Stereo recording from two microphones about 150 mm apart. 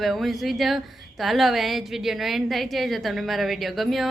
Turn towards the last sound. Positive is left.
turn(degrees=0)  # may be behind; listen again after turning